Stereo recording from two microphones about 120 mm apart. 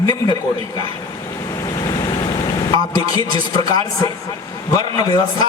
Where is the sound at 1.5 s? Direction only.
30° left (ahead or behind).